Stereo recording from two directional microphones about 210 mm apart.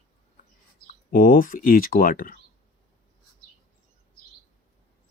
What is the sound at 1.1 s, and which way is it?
Speech, 40° left (ahead or behind).